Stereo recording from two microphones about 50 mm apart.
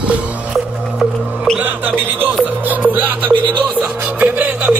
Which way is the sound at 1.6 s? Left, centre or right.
Right.